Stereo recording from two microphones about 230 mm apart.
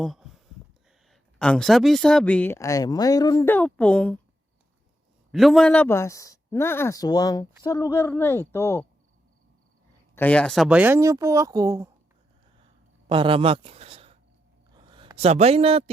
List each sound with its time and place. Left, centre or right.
0.0 s a sound: centre
1.1 s speech: centre
5.3 s speech: centre
10.2 s speech: centre
13.1 s a man's voice: right